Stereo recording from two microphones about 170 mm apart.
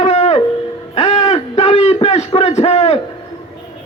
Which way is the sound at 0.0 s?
35° left (ahead or behind).